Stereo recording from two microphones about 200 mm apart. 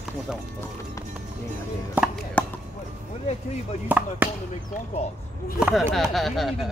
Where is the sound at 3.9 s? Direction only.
10° right (ahead or behind).